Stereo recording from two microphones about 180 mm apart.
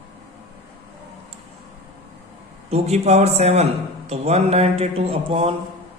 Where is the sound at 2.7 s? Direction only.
35° right (ahead or behind).